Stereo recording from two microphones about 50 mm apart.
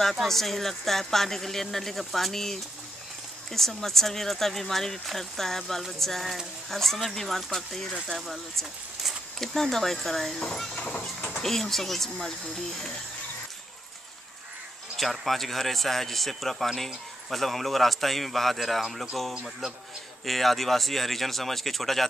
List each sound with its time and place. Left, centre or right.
0.1 s speech: centre
10.8 s speech: left
11.1 s speech: left
11.4 s speech: centre
15.0 s speech: centre